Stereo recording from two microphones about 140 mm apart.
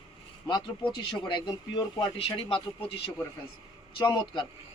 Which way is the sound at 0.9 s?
35° left (ahead or behind).